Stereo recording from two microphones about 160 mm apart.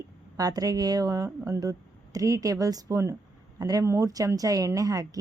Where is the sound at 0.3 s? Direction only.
25° right (ahead or behind).